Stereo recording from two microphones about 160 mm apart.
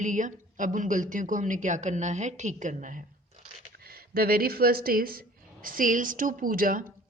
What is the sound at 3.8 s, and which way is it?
A woman's voice, 70° right (ahead or behind).